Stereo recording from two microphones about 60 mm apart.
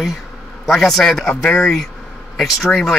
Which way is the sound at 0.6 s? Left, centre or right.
Centre.